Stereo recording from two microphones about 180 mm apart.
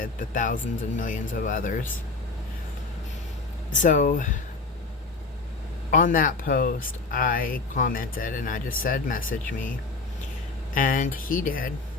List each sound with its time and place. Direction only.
0.0 s speech: 45° left (ahead or behind)
3.8 s speech: 45° left (ahead or behind)
5.9 s speech: 50° left (ahead or behind)
10.8 s speech: 50° left (ahead or behind)